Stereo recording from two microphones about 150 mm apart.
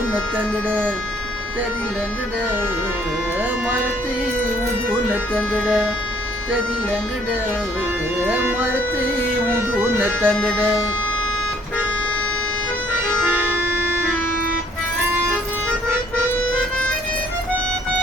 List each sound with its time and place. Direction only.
0.3 s speech: 10° right (ahead or behind)
5.3 s speech: 5° left (ahead or behind)
8.2 s speech: 15° right (ahead or behind)
13.3 s organ: 15° right (ahead or behind)